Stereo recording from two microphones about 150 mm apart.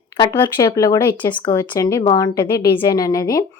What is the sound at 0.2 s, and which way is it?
A woman's voice, 30° left (ahead or behind).